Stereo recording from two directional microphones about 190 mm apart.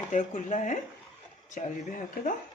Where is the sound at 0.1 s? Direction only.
40° left (ahead or behind).